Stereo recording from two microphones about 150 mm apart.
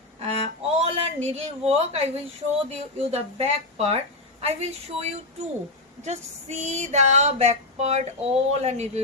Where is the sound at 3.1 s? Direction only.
45° right (ahead or behind).